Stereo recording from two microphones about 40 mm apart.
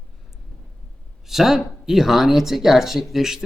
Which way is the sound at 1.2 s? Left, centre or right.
Centre.